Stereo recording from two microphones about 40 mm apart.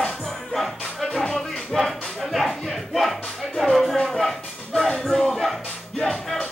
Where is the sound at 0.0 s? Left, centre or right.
Centre.